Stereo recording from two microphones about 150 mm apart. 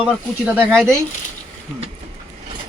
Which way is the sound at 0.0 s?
10° right (ahead or behind).